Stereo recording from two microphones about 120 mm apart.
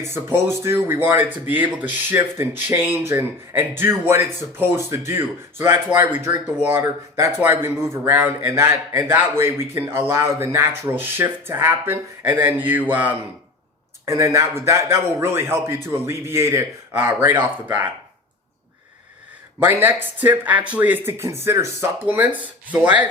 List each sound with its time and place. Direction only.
0.1 s speech: 20° right (ahead or behind)
14.0 s speech: 25° right (ahead or behind)
19.5 s speech: 20° right (ahead or behind)